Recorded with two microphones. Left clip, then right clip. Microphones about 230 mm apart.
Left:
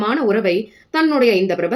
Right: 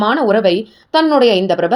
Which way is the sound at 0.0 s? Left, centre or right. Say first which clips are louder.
Right 5 dB; right.